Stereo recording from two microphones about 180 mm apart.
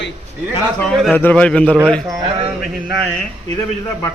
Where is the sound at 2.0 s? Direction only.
20° right (ahead or behind).